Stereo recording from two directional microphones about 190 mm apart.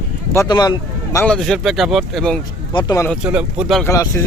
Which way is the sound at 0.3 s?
20° left (ahead or behind).